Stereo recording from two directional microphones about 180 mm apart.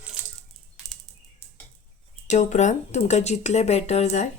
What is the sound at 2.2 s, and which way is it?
Speech, 40° left (ahead or behind).